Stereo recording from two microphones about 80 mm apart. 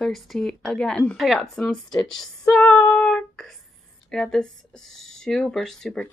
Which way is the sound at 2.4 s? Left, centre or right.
Centre.